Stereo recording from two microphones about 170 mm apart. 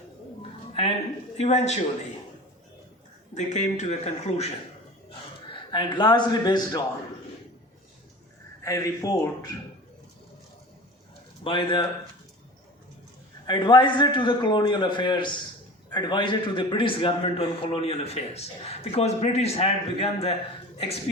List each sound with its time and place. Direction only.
0.7 s music: 35° left (ahead or behind)
1.4 s a man's voice: 40° left (ahead or behind)
3.3 s speech: 45° left (ahead or behind)
5.5 s a man's voice: 25° left (ahead or behind)
8.6 s a man's voice: 20° left (ahead or behind)
11.4 s a man's voice: 30° left (ahead or behind)
13.5 s a man's voice: 25° left (ahead or behind)